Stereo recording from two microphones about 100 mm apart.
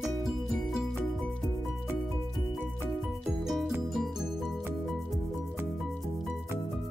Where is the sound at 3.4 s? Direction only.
5° right (ahead or behind).